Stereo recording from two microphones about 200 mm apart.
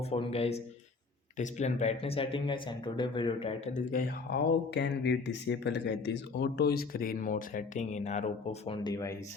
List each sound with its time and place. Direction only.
0.0 s speech: 30° left (ahead or behind)
3.8 s speech: 40° left (ahead or behind)
4.7 s speech: 55° left (ahead or behind); by 9.1 s 20° left (ahead or behind)